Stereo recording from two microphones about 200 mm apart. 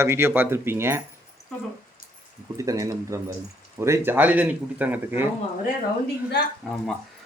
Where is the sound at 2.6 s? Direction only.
15° right (ahead or behind).